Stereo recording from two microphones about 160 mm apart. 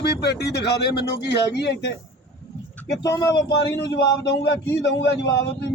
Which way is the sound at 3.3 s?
90° left.